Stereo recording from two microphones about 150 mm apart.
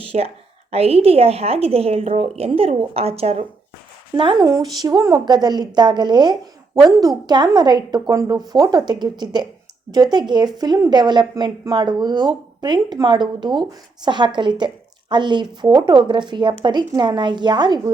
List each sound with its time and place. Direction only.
0.0 s a woman's voice: 40° right (ahead or behind)
4.1 s a woman's voice: 30° right (ahead or behind)